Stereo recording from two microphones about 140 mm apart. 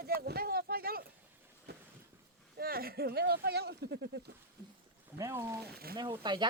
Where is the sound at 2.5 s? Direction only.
90° right.